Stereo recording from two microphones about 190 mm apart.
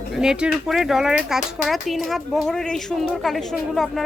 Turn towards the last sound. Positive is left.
turn(degrees=0)  # may be behind; listen again after turning